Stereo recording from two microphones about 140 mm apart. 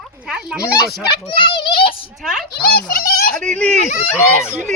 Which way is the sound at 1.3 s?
35° left (ahead or behind).